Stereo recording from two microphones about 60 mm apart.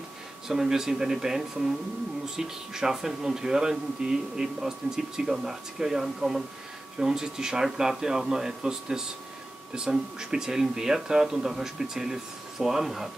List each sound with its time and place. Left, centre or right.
0.5 s speech: centre